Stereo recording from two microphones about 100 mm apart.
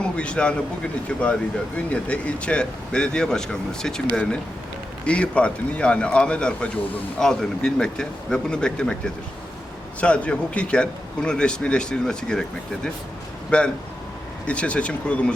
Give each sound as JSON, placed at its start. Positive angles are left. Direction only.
{"t": 0.0, "sound": "speech", "side_deg": 10}